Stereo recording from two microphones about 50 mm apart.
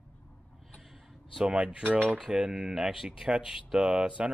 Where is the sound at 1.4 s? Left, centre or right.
Right.